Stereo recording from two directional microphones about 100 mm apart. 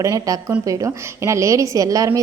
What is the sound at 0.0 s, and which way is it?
A woman's voice, 35° right (ahead or behind).